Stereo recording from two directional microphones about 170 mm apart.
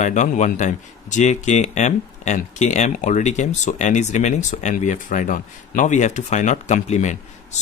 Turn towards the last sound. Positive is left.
turn(degrees=45)  # may be behind; listen again after turning